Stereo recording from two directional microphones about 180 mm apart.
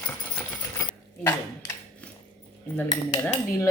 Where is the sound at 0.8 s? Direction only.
15° left (ahead or behind).